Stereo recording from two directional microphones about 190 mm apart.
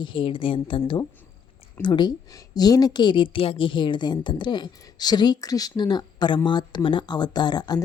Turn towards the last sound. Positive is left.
turn(degrees=20)  # may be behind; listen again after turning